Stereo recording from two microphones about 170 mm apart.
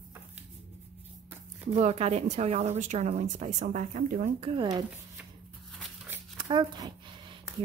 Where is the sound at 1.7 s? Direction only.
40° right (ahead or behind).